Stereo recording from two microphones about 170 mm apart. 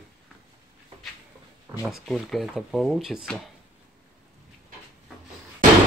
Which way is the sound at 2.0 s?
Centre (ahead or behind).